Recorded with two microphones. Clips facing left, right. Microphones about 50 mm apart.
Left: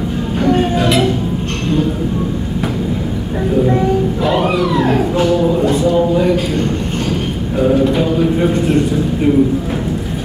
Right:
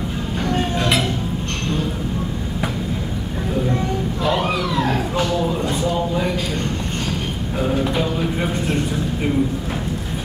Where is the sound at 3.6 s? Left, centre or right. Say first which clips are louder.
Left 8 dB; left.